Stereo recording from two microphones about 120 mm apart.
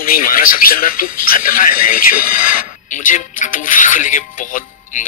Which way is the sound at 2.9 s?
90° left.